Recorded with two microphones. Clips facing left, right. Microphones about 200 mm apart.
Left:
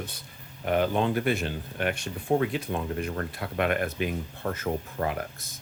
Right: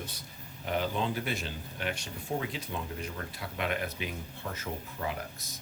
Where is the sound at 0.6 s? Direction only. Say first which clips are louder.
Left 7 dB; 60° left (ahead or behind).